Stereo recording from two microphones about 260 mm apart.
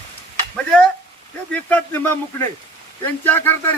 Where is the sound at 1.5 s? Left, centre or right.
Centre.